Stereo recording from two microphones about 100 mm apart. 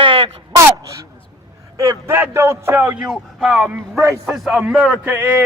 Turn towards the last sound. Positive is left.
turn(degrees=-20)  # may be behind; listen again after turning